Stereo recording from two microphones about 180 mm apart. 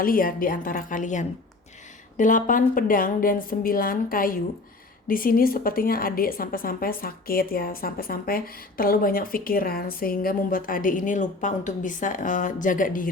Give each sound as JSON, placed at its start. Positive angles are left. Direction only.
{"t": 0.0, "sound": "a woman's voice", "side_deg": 50}